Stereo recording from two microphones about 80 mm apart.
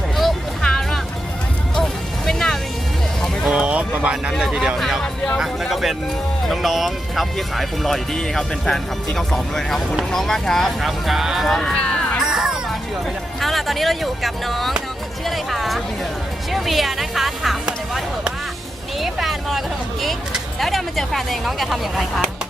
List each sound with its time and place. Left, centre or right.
0.2 s music: centre
3.5 s a sound: centre
4.3 s speech: centre
12.2 s music: centre
13.4 s speech: centre
18.9 s speech: centre